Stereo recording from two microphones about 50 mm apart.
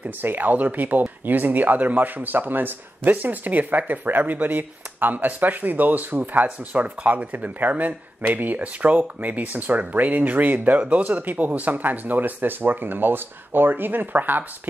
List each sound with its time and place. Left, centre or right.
0.0 s speech: right